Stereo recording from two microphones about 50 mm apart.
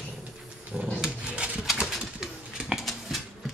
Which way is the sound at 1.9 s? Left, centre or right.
Centre.